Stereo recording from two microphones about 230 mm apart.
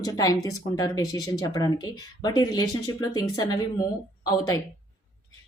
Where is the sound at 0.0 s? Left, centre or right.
Centre.